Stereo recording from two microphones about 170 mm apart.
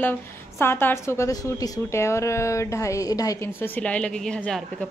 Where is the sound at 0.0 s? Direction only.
10° left (ahead or behind).